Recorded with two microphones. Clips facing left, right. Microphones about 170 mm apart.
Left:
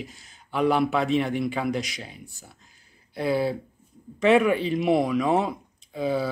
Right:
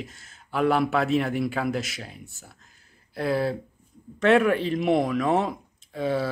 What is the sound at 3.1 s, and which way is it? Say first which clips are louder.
A man's voice: left 1 dB; centre (ahead or behind).